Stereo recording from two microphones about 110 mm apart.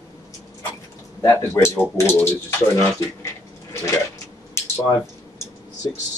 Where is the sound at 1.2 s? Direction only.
20° left (ahead or behind).